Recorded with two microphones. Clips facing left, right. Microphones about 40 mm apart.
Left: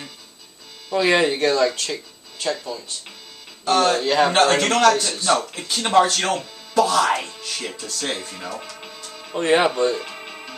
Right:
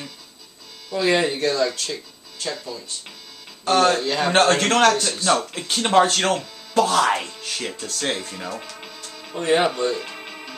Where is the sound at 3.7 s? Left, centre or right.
Right.